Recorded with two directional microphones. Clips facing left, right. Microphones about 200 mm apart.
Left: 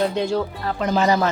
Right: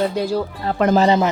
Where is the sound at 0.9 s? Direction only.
30° right (ahead or behind).